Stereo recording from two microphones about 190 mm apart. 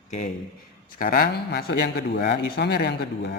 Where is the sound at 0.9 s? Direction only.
45° left (ahead or behind).